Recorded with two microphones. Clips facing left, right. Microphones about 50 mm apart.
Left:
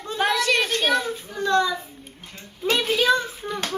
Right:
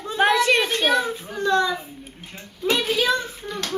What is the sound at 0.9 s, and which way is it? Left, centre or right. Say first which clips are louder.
Child singing: right 2 dB; centre.